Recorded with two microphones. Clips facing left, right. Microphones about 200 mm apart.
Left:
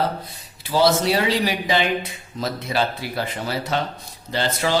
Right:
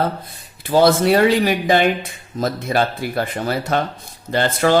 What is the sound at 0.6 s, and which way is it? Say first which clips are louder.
Speech: right 4 dB; 50° right (ahead or behind).